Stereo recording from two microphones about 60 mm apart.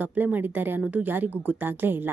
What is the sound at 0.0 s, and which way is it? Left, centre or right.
Speech, right.